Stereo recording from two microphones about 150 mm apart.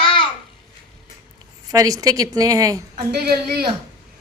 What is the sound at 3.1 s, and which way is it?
Speech, 90° right.